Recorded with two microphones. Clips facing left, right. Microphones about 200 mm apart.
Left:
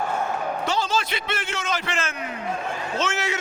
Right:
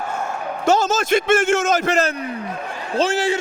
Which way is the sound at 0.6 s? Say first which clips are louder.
Right 11 dB; 45° right (ahead or behind).